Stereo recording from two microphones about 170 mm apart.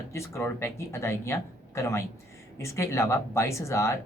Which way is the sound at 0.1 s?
15° left (ahead or behind).